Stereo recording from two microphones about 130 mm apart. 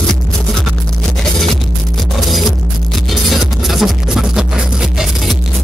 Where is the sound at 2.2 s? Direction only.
Centre (ahead or behind).